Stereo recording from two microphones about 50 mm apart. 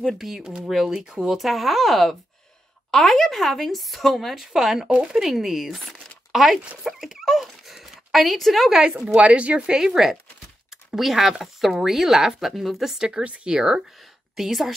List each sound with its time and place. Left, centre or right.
0.0 s speech: centre
4.5 s speech: centre
8.9 s speech: right
9.7 s speech: centre
13.1 s a woman's voice: right; by 14.7 s centre